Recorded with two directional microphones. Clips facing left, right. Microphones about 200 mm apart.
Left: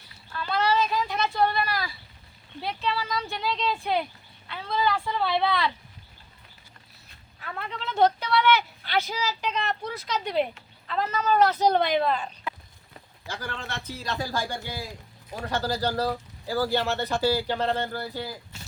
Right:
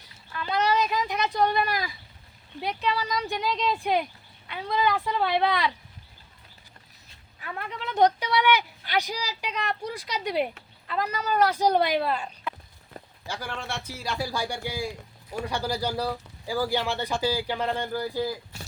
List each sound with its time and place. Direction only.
0.4 s a sound: 15° right (ahead or behind)
2.6 s speech: 15° right (ahead or behind)
7.4 s speech: 10° right (ahead or behind)